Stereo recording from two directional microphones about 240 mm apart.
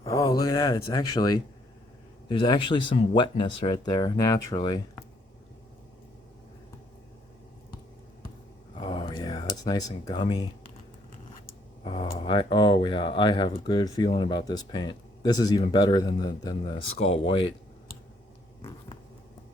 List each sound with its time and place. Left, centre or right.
0.0 s speech: centre
8.7 s a sound: left
9.6 s speech: centre
11.9 s speech: left